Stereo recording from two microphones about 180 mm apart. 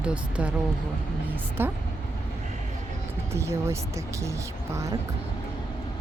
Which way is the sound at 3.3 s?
15° right (ahead or behind).